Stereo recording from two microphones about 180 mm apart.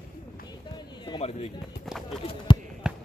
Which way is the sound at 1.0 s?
30° left (ahead or behind).